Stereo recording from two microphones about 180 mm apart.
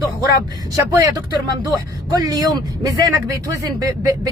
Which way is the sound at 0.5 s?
20° right (ahead or behind).